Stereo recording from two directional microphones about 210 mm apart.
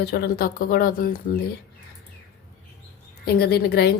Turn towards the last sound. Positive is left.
turn(degrees=50)  # may be behind; listen again after turning